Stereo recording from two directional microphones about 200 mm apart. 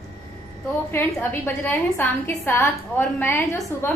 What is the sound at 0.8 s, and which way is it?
A woman's voice, 10° left (ahead or behind).